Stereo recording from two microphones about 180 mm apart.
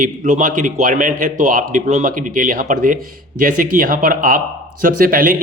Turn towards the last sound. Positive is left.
turn(degrees=-50)  # may be behind; listen again after turning